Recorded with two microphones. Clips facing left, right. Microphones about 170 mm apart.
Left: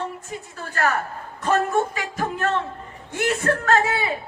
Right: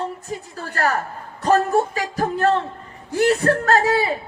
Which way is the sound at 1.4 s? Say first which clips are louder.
Right 3 dB; 35° right (ahead or behind).